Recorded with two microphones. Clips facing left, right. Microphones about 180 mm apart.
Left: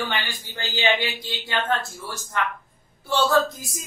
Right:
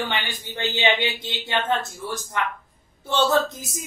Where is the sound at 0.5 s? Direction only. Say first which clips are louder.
Right 1 dB; 25° right (ahead or behind).